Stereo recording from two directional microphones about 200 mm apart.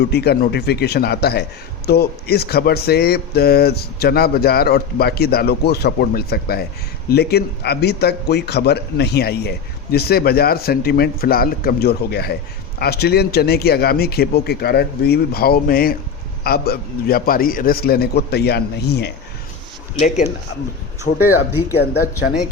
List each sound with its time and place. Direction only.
0.0 s speech: 55° left (ahead or behind)
20.0 s speech: 35° left (ahead or behind)